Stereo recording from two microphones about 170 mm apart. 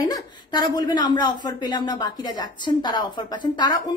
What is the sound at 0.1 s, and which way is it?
A woman's voice, 25° left (ahead or behind).